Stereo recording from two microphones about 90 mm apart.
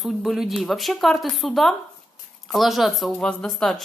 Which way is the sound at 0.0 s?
Centre (ahead or behind).